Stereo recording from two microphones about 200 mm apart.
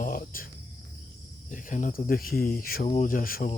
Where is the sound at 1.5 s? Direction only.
40° left (ahead or behind).